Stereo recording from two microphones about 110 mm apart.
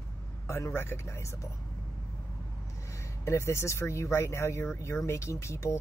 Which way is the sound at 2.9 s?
25° left (ahead or behind).